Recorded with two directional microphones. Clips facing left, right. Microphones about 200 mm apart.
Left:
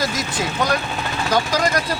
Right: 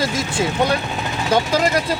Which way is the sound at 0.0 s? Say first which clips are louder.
Right 3 dB; 25° right (ahead or behind).